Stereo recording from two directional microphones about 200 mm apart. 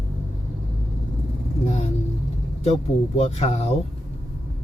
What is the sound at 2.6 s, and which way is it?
Speech, 35° left (ahead or behind).